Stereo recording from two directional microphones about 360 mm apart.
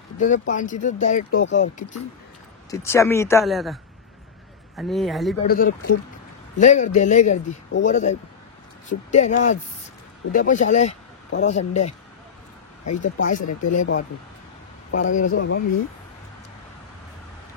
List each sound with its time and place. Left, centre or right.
0.2 s speech: left
2.7 s a man's voice: centre
5.5 s speech: left
12.9 s speech: left
13.5 s speech: left
14.9 s speech: left